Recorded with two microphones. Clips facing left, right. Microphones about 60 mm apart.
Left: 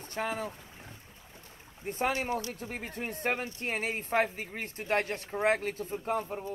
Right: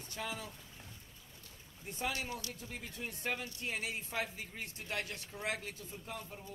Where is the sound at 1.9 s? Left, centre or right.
Left.